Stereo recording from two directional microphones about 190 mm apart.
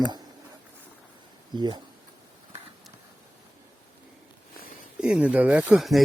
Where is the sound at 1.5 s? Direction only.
25° right (ahead or behind).